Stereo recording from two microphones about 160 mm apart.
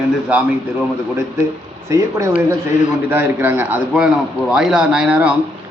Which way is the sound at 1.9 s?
20° right (ahead or behind).